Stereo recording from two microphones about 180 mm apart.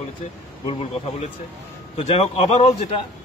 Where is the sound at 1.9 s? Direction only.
35° left (ahead or behind).